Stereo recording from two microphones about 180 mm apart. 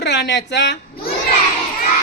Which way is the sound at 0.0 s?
70° left (ahead or behind).